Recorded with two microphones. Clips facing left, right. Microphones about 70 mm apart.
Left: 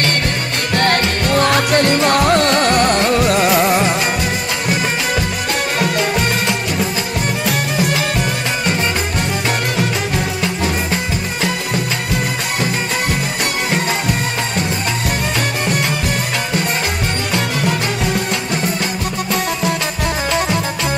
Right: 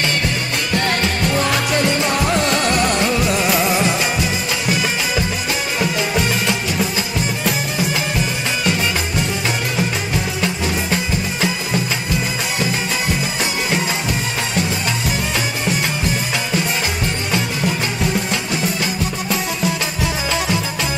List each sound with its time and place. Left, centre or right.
0.7 s music: left
3.4 s music: centre
9.8 s music: centre
18.1 s music: centre